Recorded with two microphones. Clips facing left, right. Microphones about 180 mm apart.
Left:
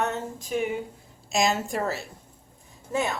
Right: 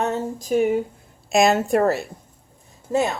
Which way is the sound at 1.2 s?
60° right (ahead or behind).